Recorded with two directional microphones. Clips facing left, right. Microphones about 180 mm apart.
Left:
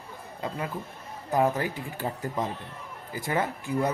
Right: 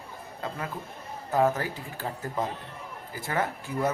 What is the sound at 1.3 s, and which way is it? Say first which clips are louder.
Speech: even; 15° left (ahead or behind).